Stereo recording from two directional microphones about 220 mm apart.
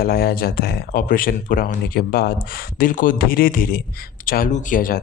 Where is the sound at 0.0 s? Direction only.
45° left (ahead or behind).